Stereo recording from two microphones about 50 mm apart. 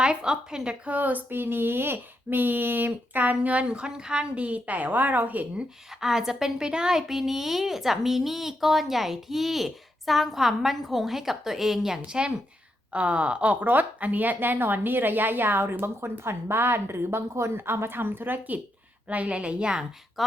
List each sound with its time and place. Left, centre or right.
0.0 s a woman's voice: centre
0.9 s speech: right
5.9 s a woman's voice: centre
12.0 s a woman's voice: right
19.0 s a woman's voice: right
20.2 s a woman's voice: centre